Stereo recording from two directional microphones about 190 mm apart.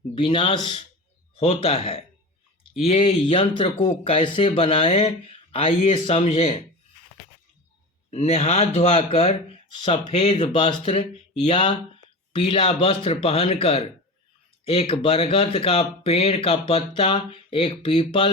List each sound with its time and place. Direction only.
0.1 s speech: 25° left (ahead or behind)
8.1 s speech: 35° left (ahead or behind)